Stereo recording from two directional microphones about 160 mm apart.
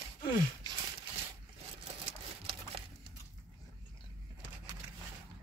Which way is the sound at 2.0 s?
40° right (ahead or behind).